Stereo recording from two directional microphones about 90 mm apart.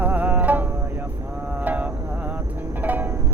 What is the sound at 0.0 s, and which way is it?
Music, 20° right (ahead or behind).